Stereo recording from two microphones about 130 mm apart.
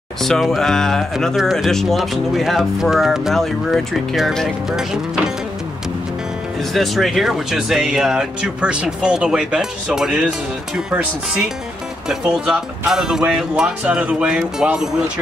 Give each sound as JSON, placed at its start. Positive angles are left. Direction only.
{"t": 0.2, "sound": "speech", "side_deg": 0}
{"t": 6.7, "sound": "speech", "side_deg": 0}